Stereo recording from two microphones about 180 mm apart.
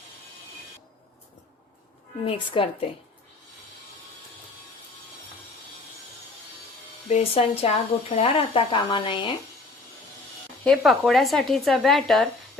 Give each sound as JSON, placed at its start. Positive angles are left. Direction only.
{"t": 2.2, "sound": "speech", "side_deg": 30}
{"t": 7.1, "sound": "speech", "side_deg": 35}
{"t": 10.6, "sound": "speech", "side_deg": 0}